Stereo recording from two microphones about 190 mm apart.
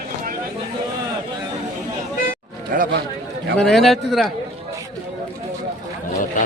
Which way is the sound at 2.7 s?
45° right (ahead or behind).